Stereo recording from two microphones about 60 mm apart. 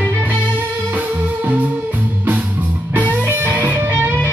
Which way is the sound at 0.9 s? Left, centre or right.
Right.